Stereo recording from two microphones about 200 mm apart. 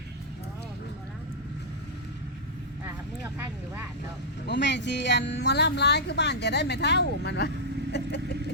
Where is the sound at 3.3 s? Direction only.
10° right (ahead or behind).